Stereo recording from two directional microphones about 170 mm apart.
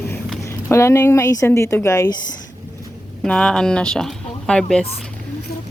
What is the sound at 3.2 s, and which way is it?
Speech, 5° left (ahead or behind).